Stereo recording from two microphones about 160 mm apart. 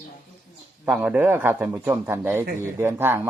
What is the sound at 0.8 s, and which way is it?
A man's voice, 5° right (ahead or behind).